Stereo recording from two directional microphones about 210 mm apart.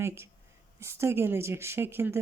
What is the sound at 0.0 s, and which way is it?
Speech, 10° right (ahead or behind).